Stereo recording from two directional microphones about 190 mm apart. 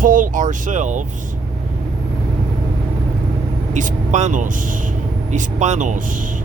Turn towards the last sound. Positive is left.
turn(degrees=-40)  # may be behind; listen again after turning